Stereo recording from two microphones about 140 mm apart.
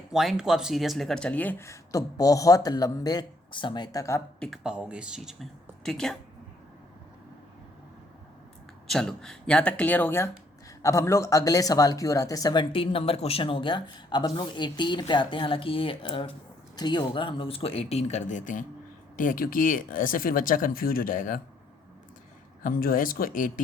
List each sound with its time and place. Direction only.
0.1 s speech: 5° right (ahead or behind); by 4.2 s 25° left (ahead or behind)
4.4 s speech: centre (ahead or behind)
8.9 s speech: 5° left (ahead or behind); by 21.4 s 80° left
22.6 s speech: 90° left